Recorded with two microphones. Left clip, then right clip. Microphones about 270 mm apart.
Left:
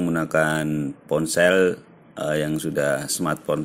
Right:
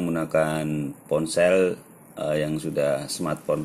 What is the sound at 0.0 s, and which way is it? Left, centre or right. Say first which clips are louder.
Speech: left 2 dB; left.